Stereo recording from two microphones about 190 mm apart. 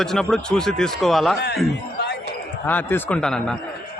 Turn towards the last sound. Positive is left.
turn(degrees=5)  # may be behind; listen again after turning